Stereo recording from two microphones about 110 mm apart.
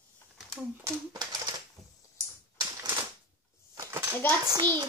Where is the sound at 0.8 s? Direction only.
40° right (ahead or behind).